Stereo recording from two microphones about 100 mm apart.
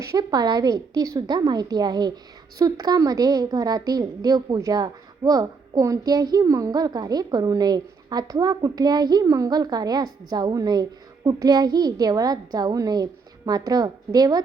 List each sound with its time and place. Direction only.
0.0 s a woman's voice: 35° right (ahead or behind)